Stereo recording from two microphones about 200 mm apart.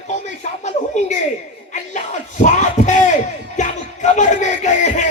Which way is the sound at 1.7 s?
40° left (ahead or behind).